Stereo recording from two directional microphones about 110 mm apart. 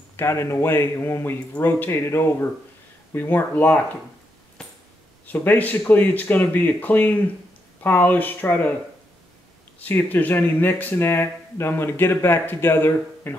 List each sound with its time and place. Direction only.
0.1 s speech: 25° left (ahead or behind)
5.2 s speech: 15° left (ahead or behind)
9.8 s speech: 15° left (ahead or behind)